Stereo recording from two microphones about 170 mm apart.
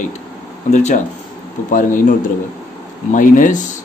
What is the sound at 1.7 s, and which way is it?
Speech, 50° left (ahead or behind).